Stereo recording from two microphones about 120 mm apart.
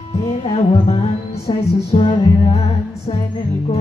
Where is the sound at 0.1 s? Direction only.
55° left (ahead or behind).